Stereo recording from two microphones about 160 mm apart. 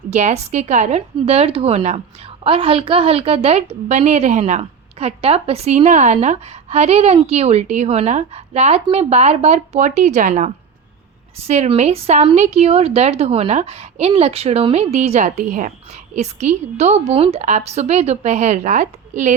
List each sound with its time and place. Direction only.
0.1 s a woman's voice: 45° right (ahead or behind)